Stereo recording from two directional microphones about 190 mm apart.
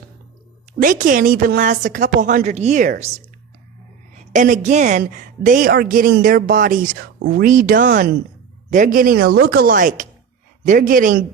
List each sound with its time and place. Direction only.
0.8 s a woman's voice: 45° right (ahead or behind)
4.1 s a woman's voice: 40° right (ahead or behind)